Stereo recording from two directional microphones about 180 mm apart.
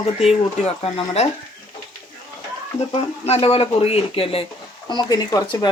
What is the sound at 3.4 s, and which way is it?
Speech, 35° left (ahead or behind).